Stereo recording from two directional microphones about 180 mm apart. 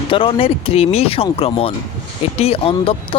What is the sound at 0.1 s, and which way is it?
Speech, 30° left (ahead or behind).